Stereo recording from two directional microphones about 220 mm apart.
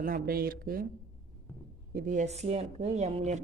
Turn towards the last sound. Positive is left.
turn(degrees=-30)  # may be behind; listen again after turning